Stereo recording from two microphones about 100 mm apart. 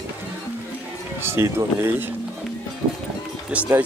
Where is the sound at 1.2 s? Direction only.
25° right (ahead or behind).